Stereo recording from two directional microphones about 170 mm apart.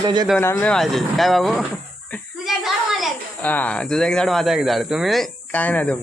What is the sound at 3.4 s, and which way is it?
Speech, 10° left (ahead or behind).